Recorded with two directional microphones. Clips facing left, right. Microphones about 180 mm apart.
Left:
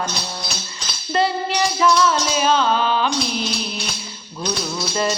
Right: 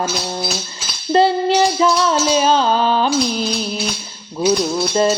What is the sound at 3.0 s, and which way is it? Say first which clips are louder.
Music: right 5 dB; centre (ahead or behind).